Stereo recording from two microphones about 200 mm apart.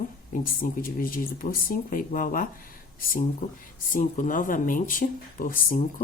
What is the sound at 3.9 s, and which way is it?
A man's voice, 40° left (ahead or behind).